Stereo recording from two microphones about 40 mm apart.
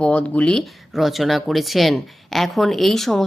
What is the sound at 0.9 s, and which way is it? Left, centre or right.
A woman's voice, centre.